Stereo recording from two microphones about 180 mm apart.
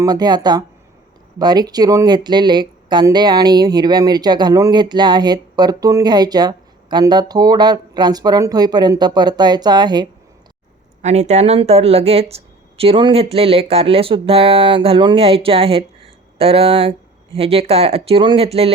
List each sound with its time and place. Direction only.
0.0 s speech: 20° right (ahead or behind)
11.0 s speech: 40° right (ahead or behind)